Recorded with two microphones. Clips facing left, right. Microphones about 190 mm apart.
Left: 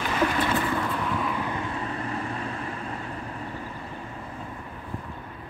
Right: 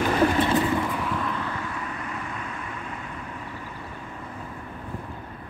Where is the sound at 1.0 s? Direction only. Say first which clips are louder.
Left 1 dB; 5° left (ahead or behind); by 2.7 s 35° left (ahead or behind).